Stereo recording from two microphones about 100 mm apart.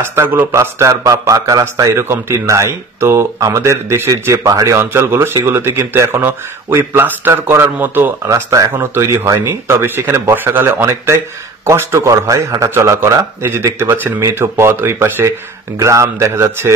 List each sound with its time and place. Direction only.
0.0 s speech: 25° right (ahead or behind)
8.3 s speech: 35° right (ahead or behind)